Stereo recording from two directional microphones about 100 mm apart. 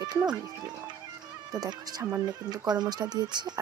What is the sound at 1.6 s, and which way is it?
Speech, 40° right (ahead or behind).